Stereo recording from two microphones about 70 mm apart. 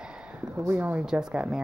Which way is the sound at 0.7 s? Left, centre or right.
Right.